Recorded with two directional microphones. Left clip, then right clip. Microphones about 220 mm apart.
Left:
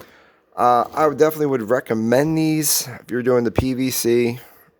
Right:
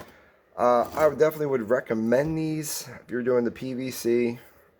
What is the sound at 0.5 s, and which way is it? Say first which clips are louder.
Speech: left 6 dB; 55° left (ahead or behind).